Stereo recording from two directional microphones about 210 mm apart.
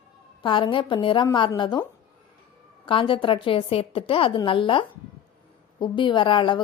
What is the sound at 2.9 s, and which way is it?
A woman's voice, 25° left (ahead or behind).